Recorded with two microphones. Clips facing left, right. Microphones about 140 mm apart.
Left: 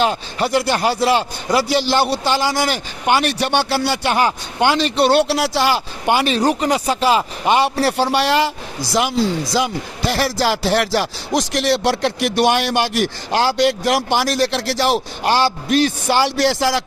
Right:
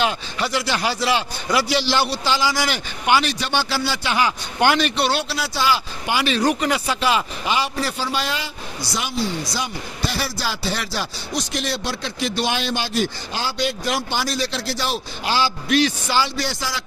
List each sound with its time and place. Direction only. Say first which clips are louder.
0.0 s a man's voice: left 4 dB; 45° left (ahead or behind)
4.6 s speech: left 2 dB; 25° left (ahead or behind)
4.9 s a man's voice: left 7 dB; 50° left (ahead or behind)
5.3 s speech: left 5 dB; 70° left (ahead or behind); by 7.5 s 40° left (ahead or behind)
7.5 s speech: left 8 dB; 60° left (ahead or behind); by 16.8 s 85° left